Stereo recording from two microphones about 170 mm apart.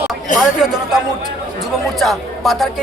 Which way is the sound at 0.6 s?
5° right (ahead or behind).